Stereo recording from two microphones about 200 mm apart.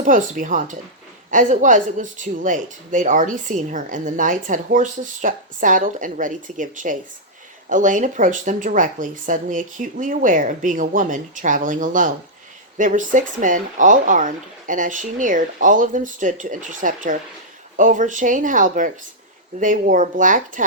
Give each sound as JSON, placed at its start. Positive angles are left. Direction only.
{"t": 0.0, "sound": "speech", "side_deg": -40}